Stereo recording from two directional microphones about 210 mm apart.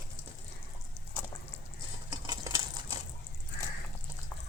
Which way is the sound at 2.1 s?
20° right (ahead or behind).